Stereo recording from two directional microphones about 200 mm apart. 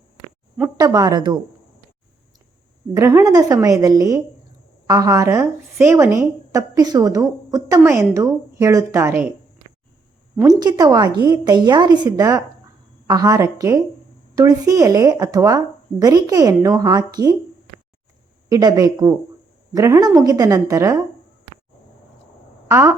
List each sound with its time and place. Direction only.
0.8 s a woman's voice: 20° right (ahead or behind)
2.9 s a woman's voice: 15° right (ahead or behind)
10.3 s a woman's voice: 20° right (ahead or behind)
18.4 s a woman's voice: 15° right (ahead or behind)
22.7 s a woman's voice: 15° right (ahead or behind)